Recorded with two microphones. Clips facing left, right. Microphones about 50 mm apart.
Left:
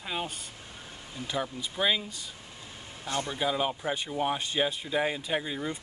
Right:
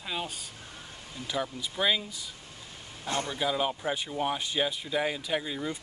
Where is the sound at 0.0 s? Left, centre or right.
Centre.